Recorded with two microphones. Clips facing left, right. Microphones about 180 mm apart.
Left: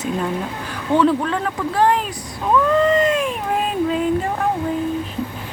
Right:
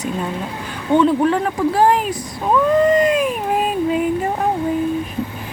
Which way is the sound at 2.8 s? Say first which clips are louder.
Right 2 dB; 15° right (ahead or behind).